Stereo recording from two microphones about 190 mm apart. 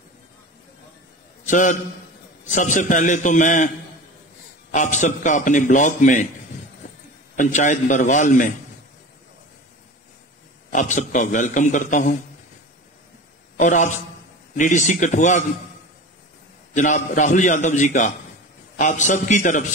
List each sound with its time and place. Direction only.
1.4 s a man's voice: 40° left (ahead or behind)
7.3 s a man's voice: 40° left (ahead or behind)
10.7 s a man's voice: 40° left (ahead or behind)
13.6 s a man's voice: 40° left (ahead or behind)
16.7 s a man's voice: 40° left (ahead or behind)